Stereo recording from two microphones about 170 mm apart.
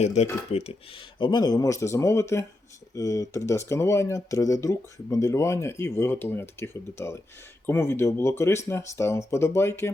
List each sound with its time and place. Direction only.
0.0 s speech: 40° left (ahead or behind); by 9.9 s 15° left (ahead or behind)